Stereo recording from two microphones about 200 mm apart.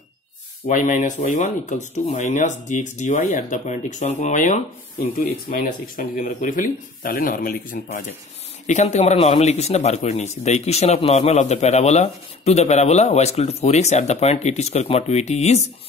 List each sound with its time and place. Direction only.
0.7 s a man's voice: 40° left (ahead or behind)